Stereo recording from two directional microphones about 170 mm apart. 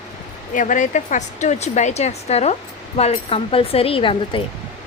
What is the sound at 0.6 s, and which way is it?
A woman's voice, 50° left (ahead or behind).